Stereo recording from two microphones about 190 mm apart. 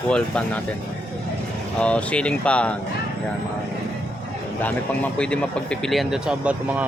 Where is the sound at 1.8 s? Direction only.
5° left (ahead or behind).